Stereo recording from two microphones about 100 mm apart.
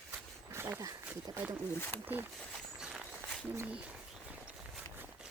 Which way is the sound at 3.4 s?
25° right (ahead or behind).